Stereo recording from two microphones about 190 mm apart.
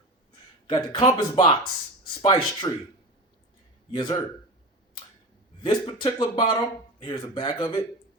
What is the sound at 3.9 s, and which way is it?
Speech, 25° left (ahead or behind).